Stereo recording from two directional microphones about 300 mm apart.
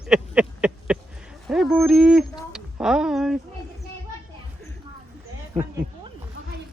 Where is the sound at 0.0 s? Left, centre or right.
Centre.